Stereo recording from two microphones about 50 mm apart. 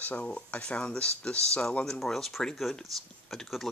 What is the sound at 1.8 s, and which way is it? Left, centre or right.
Speech, centre.